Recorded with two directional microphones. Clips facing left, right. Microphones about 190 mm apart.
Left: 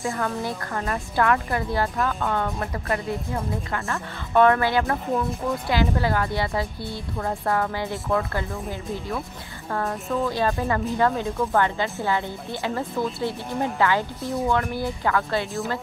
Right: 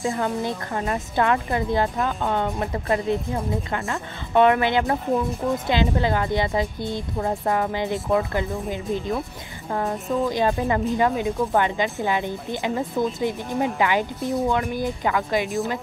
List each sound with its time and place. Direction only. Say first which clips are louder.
0.0 s a woman's voice: right 2 dB; 20° right (ahead or behind)